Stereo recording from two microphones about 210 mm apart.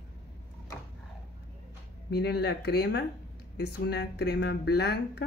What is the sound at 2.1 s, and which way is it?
Speech, 50° left (ahead or behind).